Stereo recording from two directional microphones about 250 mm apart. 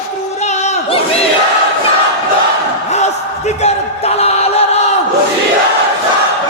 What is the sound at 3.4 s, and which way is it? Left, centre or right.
Music, left.